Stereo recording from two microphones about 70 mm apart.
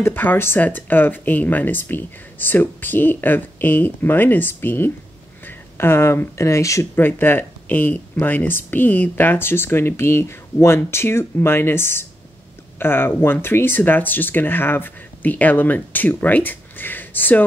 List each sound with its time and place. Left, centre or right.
0.0 s speech: left
7.0 s speech: left